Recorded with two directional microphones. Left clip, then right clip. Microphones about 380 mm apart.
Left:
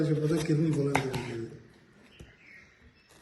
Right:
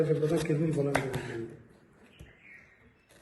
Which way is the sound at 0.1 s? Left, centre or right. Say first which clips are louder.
Right 1 dB; centre.